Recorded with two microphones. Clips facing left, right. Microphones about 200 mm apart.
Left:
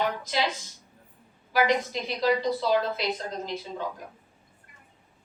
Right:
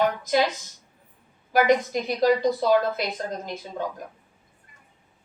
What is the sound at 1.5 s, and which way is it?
A woman's voice, 50° right (ahead or behind).